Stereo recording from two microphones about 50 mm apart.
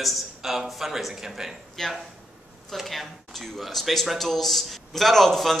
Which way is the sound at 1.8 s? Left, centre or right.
Centre.